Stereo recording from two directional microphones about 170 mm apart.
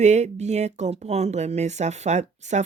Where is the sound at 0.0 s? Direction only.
40° right (ahead or behind).